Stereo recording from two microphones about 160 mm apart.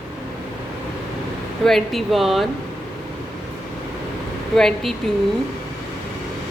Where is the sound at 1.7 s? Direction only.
Centre (ahead or behind).